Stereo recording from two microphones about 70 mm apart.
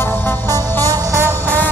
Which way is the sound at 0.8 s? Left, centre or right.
Right.